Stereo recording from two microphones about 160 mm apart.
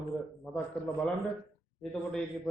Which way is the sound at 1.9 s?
10° left (ahead or behind).